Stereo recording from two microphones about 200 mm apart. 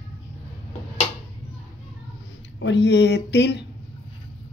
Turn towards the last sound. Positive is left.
turn(degrees=60)  # may be behind; listen again after turning